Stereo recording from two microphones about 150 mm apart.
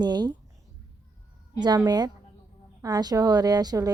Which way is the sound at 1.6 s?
30° right (ahead or behind).